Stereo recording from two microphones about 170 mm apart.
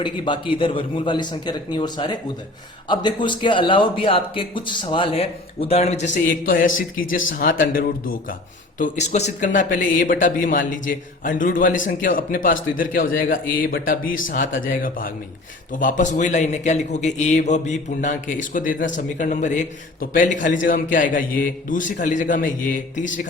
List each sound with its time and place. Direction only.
0.0 s a man's voice: 30° left (ahead or behind)
6.2 s a man's voice: 55° left (ahead or behind)
8.8 s speech: 45° left (ahead or behind)